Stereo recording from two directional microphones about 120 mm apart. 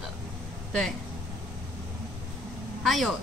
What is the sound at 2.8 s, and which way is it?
Speech, centre (ahead or behind).